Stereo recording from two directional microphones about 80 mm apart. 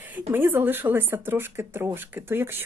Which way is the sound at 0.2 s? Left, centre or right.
Right.